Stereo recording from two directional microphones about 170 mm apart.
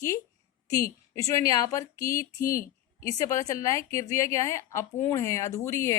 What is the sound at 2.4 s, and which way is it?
Speech, 55° left (ahead or behind).